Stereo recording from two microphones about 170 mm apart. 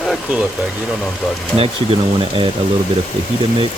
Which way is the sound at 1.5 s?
35° right (ahead or behind).